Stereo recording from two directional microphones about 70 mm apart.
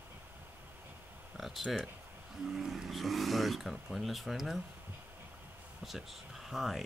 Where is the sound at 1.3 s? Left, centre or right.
Centre.